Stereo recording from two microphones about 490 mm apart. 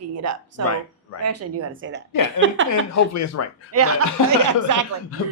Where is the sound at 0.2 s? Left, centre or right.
Right.